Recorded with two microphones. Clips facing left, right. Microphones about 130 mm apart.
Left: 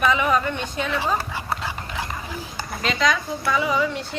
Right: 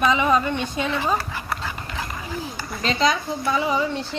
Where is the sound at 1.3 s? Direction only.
20° left (ahead or behind).